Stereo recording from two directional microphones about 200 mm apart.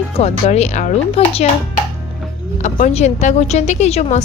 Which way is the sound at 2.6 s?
35° left (ahead or behind).